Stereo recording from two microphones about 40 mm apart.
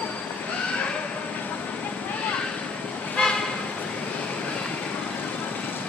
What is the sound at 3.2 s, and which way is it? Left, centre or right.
Toot, left.